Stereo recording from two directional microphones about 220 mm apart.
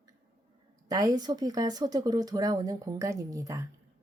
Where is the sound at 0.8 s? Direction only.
15° right (ahead or behind).